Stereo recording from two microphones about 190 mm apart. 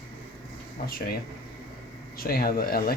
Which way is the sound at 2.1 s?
50° left (ahead or behind).